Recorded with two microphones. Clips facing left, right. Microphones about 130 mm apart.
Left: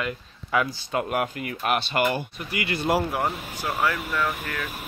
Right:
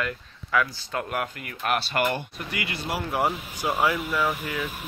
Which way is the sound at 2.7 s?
50° left (ahead or behind).